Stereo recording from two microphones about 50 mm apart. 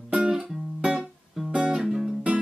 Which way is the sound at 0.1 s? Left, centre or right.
Right.